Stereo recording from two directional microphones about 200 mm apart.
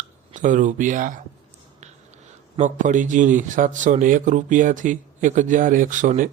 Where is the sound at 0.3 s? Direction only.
40° right (ahead or behind).